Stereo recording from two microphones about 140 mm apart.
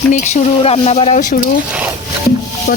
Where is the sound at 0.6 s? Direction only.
45° left (ahead or behind).